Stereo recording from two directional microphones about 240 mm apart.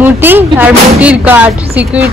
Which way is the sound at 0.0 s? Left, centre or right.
Centre.